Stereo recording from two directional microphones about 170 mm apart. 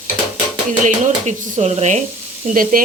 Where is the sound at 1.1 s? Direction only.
40° right (ahead or behind).